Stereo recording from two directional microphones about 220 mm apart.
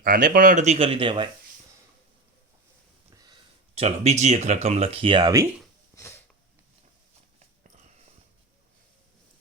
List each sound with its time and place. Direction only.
0.0 s speech: 40° right (ahead or behind); by 1.3 s 20° right (ahead or behind)
3.8 s speech: 30° right (ahead or behind)
6.0 s wheeze: 10° left (ahead or behind)
7.3 s a sound: 30° right (ahead or behind)